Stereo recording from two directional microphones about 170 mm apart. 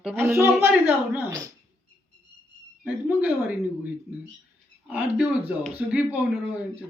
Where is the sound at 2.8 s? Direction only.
10° right (ahead or behind).